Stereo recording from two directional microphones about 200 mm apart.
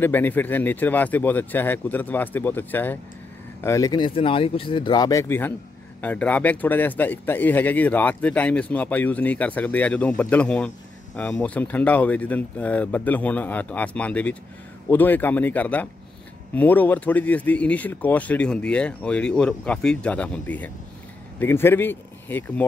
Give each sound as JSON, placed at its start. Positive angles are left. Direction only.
{"t": 0.0, "sound": "speech", "side_deg": 10}